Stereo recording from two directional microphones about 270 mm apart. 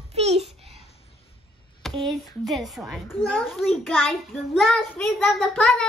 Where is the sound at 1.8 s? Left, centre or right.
Centre.